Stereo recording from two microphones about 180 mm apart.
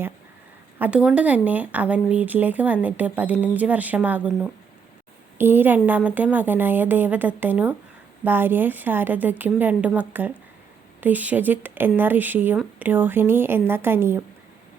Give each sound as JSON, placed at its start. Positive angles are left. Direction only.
{"t": 0.8, "sound": "speech", "side_deg": -5}
{"t": 5.4, "sound": "speech", "side_deg": -10}